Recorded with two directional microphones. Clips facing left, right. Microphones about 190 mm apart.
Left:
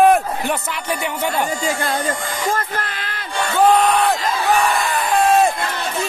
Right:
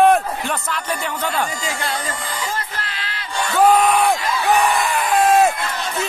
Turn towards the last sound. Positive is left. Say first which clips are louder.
# even
turn(degrees=-5)  # may be behind; listen again after turning